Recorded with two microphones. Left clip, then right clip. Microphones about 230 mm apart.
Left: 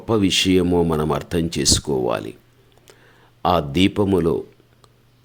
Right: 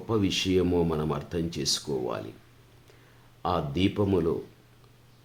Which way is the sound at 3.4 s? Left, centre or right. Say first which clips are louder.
Left 10 dB; left.